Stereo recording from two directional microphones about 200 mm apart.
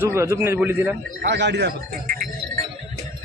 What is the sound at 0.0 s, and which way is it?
Speech, 15° right (ahead or behind).